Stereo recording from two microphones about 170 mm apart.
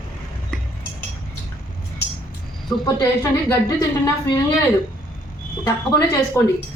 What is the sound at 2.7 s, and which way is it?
Speech, 20° left (ahead or behind).